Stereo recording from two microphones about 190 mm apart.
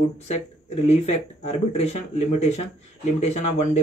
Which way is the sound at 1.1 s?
35° left (ahead or behind).